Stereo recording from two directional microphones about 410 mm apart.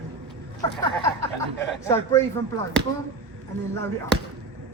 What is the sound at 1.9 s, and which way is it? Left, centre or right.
Speech, centre.